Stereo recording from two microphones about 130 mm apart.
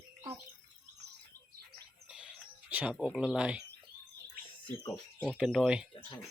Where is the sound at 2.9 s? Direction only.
5° right (ahead or behind).